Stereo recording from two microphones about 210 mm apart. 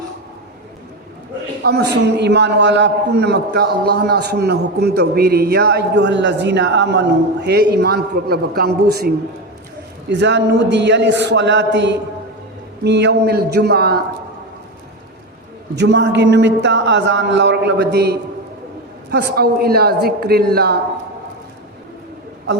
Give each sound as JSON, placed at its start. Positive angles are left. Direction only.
{"t": 1.6, "sound": "a man's voice", "side_deg": -50}
{"t": 15.7, "sound": "a man's voice", "side_deg": -55}